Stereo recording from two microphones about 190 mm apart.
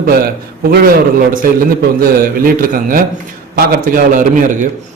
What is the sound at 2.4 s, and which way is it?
Speech, 50° right (ahead or behind).